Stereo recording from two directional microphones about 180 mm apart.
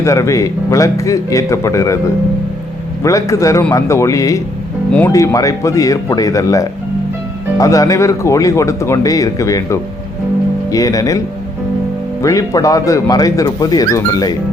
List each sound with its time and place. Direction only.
0.0 s speech: 15° left (ahead or behind)
3.0 s speech: 20° left (ahead or behind)
12.2 s speech: 20° left (ahead or behind)